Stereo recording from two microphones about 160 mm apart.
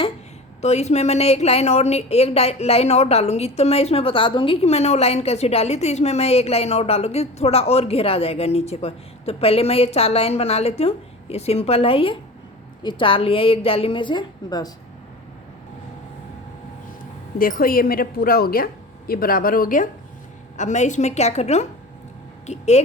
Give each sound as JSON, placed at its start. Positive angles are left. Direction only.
{"t": 0.6, "sound": "a woman's voice", "side_deg": 45}
{"t": 17.3, "sound": "a woman's voice", "side_deg": 65}
{"t": 20.6, "sound": "a woman's voice", "side_deg": 50}